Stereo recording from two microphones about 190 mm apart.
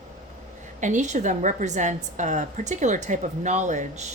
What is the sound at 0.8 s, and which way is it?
A woman's voice, 40° right (ahead or behind).